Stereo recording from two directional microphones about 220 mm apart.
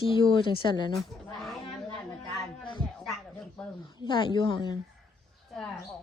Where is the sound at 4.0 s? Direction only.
20° left (ahead or behind).